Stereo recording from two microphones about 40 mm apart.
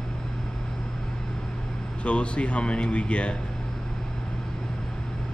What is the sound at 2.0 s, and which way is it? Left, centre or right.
Speech, left.